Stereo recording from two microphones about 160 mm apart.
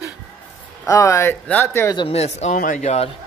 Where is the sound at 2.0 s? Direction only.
40° left (ahead or behind).